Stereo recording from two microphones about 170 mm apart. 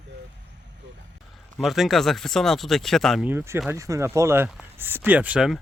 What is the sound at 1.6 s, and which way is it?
Speech, centre (ahead or behind).